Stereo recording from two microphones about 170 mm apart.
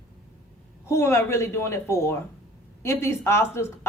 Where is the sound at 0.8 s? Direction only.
15° left (ahead or behind).